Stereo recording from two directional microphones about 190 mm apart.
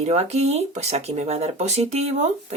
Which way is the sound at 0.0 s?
35° right (ahead or behind).